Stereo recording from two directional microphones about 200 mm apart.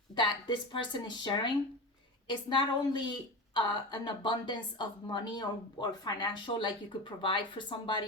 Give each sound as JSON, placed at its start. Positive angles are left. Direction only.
{"t": 0.2, "sound": "a woman's voice", "side_deg": 25}